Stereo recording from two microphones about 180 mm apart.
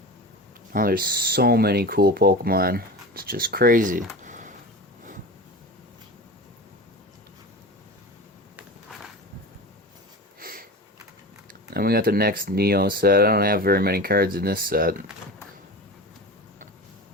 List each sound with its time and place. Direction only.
0.7 s speech: 55° right (ahead or behind)
4.2 s a sound: 45° right (ahead or behind)
10.4 s sniff: 55° right (ahead or behind)
11.7 s speech: 60° right (ahead or behind)